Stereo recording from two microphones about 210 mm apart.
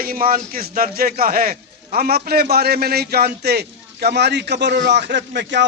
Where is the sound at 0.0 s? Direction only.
45° right (ahead or behind).